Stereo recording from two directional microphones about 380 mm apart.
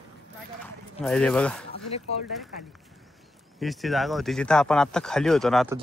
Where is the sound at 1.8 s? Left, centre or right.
Centre.